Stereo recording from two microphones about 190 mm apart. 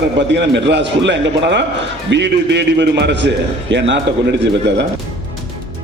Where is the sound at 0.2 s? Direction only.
65° right (ahead or behind).